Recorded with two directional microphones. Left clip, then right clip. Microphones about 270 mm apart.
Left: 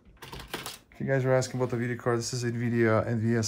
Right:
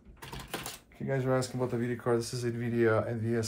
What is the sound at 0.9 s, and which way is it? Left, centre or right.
Speech, left.